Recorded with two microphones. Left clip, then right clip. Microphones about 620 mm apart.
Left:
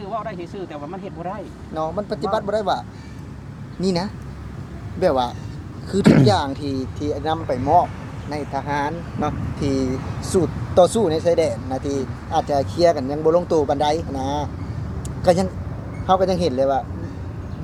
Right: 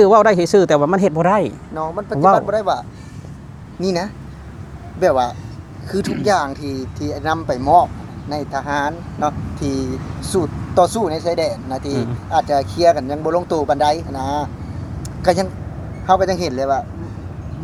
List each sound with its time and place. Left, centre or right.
0.0 s speech: right
1.7 s speech: centre; by 7.1 s right
7.3 s speech: right
8.3 s speech: right